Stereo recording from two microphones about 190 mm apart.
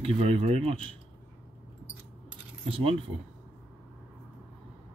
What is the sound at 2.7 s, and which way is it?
Speech, 30° right (ahead or behind).